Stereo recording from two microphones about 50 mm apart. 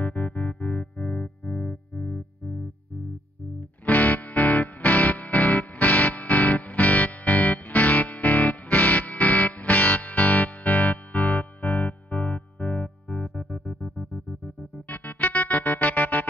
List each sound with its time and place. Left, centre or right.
0.0 s music: left
0.9 s music: centre
1.7 s music: left
3.8 s music: left
14.4 s music: left